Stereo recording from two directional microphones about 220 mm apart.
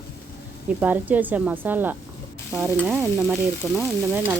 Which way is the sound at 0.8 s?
5° right (ahead or behind).